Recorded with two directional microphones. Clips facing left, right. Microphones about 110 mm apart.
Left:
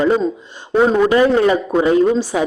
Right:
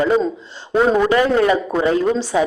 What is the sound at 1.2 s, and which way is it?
Speech, 30° left (ahead or behind).